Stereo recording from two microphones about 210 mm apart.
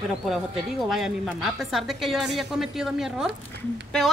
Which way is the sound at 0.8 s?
Centre (ahead or behind).